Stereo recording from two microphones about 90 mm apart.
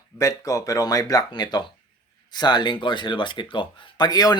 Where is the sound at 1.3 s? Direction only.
55° left (ahead or behind).